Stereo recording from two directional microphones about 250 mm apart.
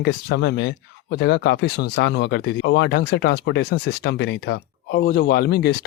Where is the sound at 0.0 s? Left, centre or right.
Left.